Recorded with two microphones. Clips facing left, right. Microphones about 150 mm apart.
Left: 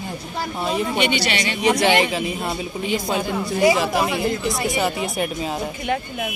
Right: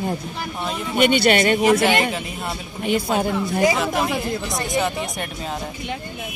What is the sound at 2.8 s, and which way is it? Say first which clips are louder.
Speech: right 3 dB; 50° right (ahead or behind).